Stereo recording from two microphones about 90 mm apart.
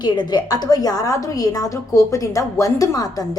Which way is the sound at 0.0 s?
55° left (ahead or behind).